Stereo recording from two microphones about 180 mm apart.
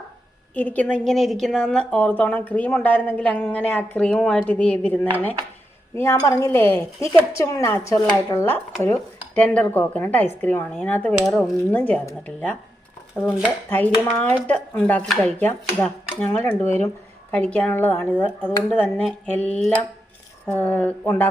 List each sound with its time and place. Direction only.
0.5 s a woman's voice: 10° left (ahead or behind)
6.0 s speech: 15° left (ahead or behind)
13.2 s a woman's voice: 5° right (ahead or behind)
13.7 s speech: 10° left (ahead or behind)